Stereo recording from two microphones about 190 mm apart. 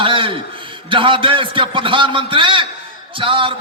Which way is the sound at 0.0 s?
25° right (ahead or behind).